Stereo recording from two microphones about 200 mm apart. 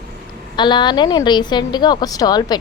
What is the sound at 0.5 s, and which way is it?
A woman's voice, 25° left (ahead or behind).